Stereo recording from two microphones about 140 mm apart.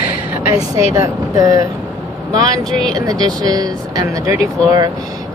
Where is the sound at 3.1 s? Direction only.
25° right (ahead or behind).